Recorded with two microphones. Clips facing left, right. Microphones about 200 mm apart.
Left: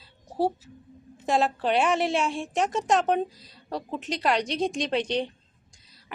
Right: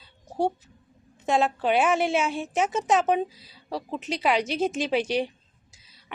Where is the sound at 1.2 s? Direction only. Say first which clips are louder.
Right 1 dB; centre (ahead or behind).